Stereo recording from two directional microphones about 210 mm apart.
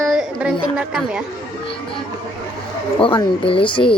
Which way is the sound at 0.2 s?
Centre (ahead or behind).